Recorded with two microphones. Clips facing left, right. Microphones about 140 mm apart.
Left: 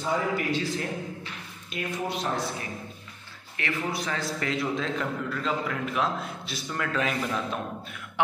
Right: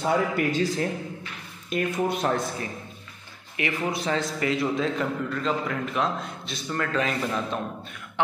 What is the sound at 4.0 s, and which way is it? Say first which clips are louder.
Speech: right 5 dB; 25° right (ahead or behind).